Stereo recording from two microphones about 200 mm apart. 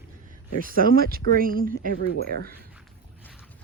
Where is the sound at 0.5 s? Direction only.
45° right (ahead or behind).